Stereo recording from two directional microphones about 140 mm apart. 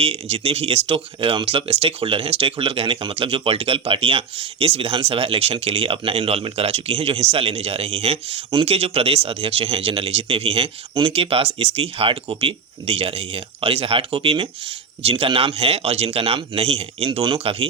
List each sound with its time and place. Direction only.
0.0 s speech: 45° right (ahead or behind)